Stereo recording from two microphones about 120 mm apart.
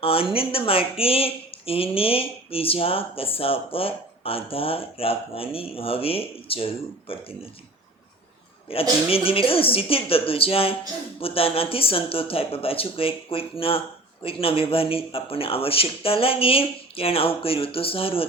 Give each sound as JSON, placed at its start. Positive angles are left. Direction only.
{"t": 0.0, "sound": "speech", "side_deg": 50}
{"t": 8.7, "sound": "speech", "side_deg": 50}